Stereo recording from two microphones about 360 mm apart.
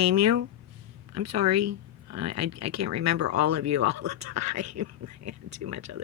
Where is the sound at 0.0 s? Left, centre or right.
Right.